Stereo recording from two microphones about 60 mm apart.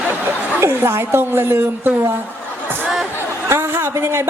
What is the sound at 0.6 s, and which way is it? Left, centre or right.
A woman's voice, right.